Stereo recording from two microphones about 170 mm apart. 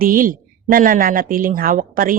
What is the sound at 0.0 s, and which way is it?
A woman's voice, 55° right (ahead or behind).